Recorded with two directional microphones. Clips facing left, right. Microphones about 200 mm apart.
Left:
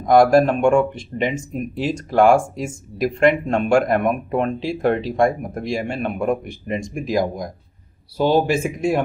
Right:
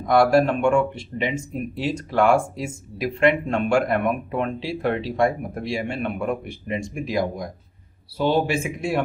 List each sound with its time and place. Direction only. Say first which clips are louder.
0.0 s speech: left 4 dB; 45° left (ahead or behind)